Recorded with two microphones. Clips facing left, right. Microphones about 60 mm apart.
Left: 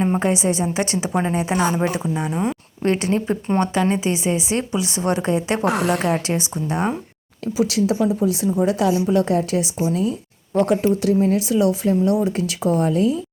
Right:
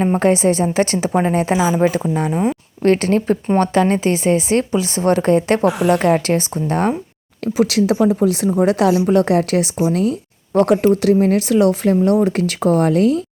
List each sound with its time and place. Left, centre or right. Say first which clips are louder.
0.2 s a woman's voice: right 5 dB; right
2.3 s speech: right 4 dB; centre
2.8 s a woman's voice: right 5 dB; right
4.0 s a woman's voice: right 5 dB; right
5.6 s a woman's voice: right 4 dB; left
5.9 s a woman's voice: right 6 dB; right
7.4 s speech: right 4 dB; right